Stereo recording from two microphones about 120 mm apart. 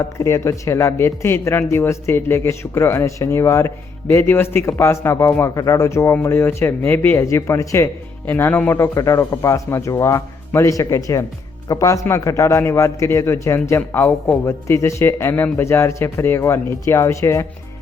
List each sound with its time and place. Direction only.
0.0 s a man's voice: 20° left (ahead or behind)